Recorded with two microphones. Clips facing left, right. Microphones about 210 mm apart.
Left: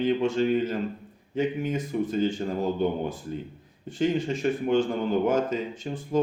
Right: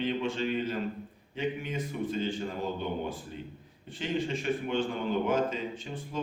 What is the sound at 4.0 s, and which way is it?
Speech, 45° left (ahead or behind).